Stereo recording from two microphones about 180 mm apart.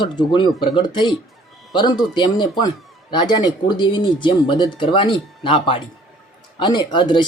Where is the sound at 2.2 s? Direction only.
25° left (ahead or behind).